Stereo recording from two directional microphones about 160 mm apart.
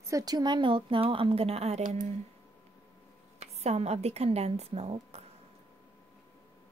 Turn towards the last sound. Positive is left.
turn(degrees=-40)  # may be behind; listen again after turning